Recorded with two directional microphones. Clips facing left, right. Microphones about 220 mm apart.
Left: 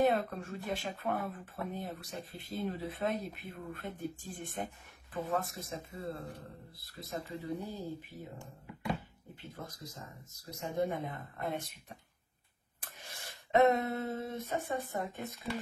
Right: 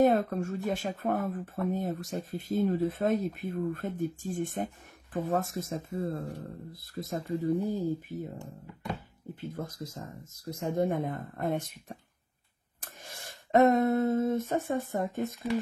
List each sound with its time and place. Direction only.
0.0 s speech: 45° right (ahead or behind)
9.4 s speech: 50° right (ahead or behind)
12.8 s a sound: 45° right (ahead or behind)
14.7 s speech: 50° right (ahead or behind)